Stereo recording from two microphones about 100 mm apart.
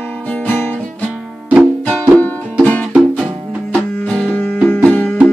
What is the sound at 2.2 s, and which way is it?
Music, 15° left (ahead or behind).